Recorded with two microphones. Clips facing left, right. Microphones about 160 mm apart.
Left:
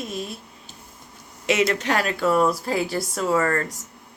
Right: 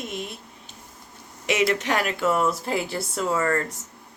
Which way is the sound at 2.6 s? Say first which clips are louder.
Left 2 dB; 20° right (ahead or behind).